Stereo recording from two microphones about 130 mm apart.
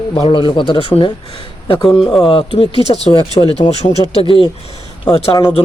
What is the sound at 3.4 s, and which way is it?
Speech, 35° left (ahead or behind).